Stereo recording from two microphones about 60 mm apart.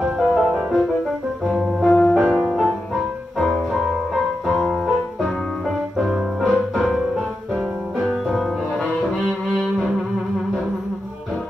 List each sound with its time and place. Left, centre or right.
0.0 s music: centre
1.9 s music: centre
2.1 s music: centre
8.1 s music: centre